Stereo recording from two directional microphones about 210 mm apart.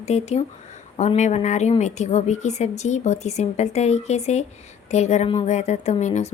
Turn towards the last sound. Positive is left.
turn(degrees=35)  # may be behind; listen again after turning